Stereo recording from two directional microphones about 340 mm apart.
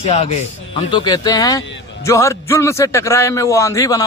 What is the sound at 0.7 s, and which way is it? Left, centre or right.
Speech, centre.